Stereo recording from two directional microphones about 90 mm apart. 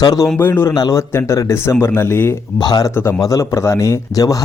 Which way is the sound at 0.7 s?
45° left (ahead or behind).